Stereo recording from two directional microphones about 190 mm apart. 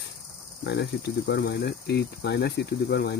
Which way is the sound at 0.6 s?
60° left (ahead or behind).